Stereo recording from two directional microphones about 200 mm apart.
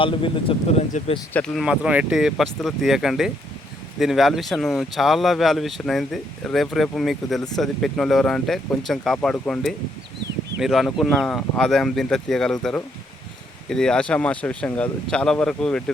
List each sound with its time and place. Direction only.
0.0 s speech: 25° left (ahead or behind)
1.3 s speech: 5° left (ahead or behind)
1.6 s speech: 5° right (ahead or behind)
13.7 s speech: 5° left (ahead or behind)